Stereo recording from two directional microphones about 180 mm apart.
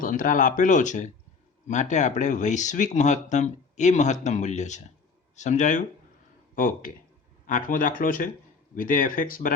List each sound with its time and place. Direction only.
0.0 s speech: 50° left (ahead or behind)